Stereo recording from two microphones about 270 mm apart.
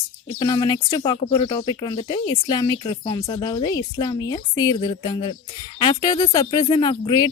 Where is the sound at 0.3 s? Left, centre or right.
Centre.